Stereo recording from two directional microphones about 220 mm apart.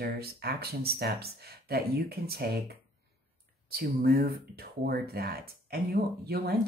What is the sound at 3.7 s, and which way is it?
Speech, 45° right (ahead or behind).